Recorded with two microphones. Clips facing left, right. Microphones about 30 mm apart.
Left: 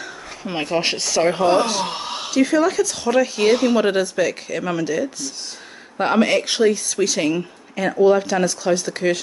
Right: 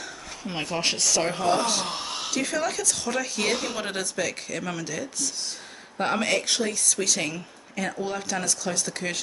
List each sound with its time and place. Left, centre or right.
0.4 s speech: left
1.4 s speech: left
1.7 s speech: centre